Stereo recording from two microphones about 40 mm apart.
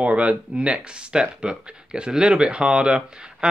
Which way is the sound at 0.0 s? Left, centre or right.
Right.